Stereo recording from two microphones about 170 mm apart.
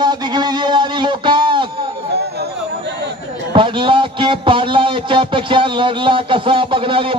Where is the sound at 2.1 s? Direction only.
75° right (ahead or behind).